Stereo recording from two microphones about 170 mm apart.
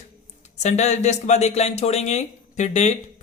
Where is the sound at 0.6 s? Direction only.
40° left (ahead or behind).